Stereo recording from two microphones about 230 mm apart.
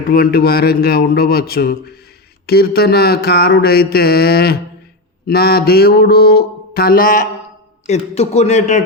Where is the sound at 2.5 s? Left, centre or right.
Left.